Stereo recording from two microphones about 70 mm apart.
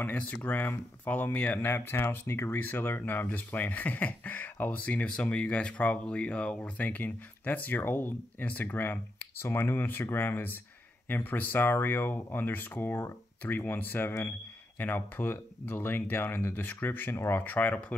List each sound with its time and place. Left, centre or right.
0.0 s speech: left